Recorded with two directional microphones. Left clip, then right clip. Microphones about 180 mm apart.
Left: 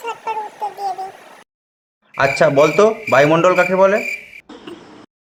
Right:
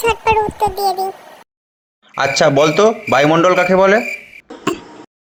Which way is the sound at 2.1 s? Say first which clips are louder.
Right 1 dB; 15° right (ahead or behind).